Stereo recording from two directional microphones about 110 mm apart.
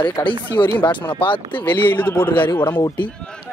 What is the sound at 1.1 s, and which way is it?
Speech, 50° left (ahead or behind).